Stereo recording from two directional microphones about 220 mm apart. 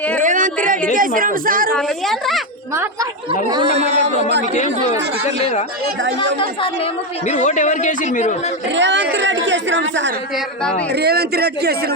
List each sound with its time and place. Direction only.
0.2 s a sound: 35° right (ahead or behind)
0.9 s speech: 40° right (ahead or behind)
1.7 s a woman's voice: centre (ahead or behind)
3.5 s a man's voice: 25° right (ahead or behind)
4.5 s a man's voice: 35° left (ahead or behind)
6.1 s a man's voice: 25° left (ahead or behind)
8.7 s speech: 55° right (ahead or behind)
10.3 s a woman's voice: 5° left (ahead or behind)
10.9 s a man's voice: 45° right (ahead or behind)